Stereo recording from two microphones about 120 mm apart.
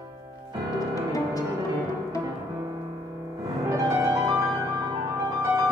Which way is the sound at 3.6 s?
25° right (ahead or behind).